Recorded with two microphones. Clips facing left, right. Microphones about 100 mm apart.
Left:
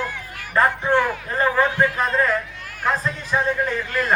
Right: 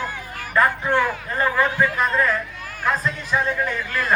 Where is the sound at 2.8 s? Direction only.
20° left (ahead or behind).